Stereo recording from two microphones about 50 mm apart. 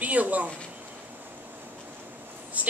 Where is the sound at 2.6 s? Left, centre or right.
Right.